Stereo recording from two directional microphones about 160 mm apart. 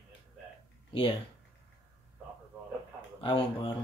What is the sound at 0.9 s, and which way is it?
Speech, 30° left (ahead or behind).